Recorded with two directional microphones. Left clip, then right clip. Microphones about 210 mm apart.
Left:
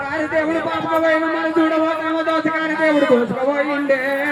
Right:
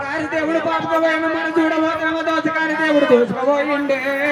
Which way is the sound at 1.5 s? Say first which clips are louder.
Left 1 dB; 20° right (ahead or behind).